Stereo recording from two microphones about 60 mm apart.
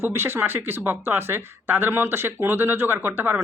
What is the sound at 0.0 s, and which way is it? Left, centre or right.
Speech, right.